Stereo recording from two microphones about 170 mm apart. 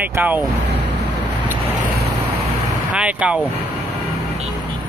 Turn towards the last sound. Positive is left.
turn(degrees=-5)  # may be behind; listen again after turning